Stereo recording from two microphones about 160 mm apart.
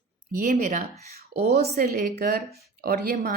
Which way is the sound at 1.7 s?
65° right (ahead or behind).